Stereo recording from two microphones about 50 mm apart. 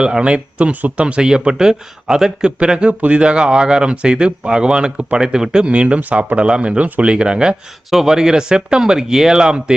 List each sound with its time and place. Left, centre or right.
0.0 s speech: centre
1.0 s speech: centre